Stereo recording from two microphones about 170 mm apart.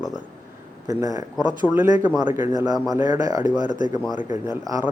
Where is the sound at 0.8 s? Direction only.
20° right (ahead or behind).